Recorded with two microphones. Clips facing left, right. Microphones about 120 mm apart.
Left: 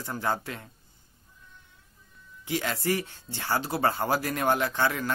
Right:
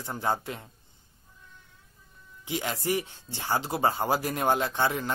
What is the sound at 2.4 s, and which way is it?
Speech, 20° right (ahead or behind).